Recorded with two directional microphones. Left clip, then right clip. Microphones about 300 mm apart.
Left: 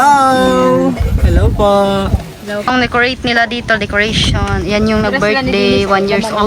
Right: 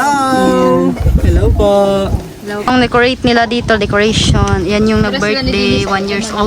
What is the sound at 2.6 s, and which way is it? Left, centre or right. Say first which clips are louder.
Speech: right 2 dB; centre.